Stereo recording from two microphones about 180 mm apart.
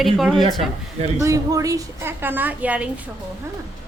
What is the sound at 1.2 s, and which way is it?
A woman's voice, 15° right (ahead or behind).